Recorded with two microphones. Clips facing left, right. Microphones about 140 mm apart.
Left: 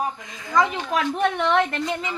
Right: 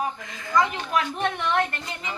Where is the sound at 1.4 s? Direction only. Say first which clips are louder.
Left 3 dB; 90° left.